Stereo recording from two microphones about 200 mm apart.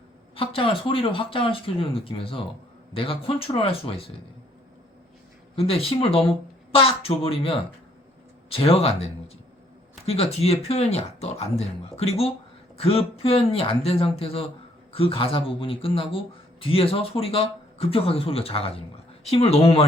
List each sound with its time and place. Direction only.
0.3 s speech: 25° left (ahead or behind)
5.5 s speech: 30° left (ahead or behind)
10.1 s speech: 30° left (ahead or behind)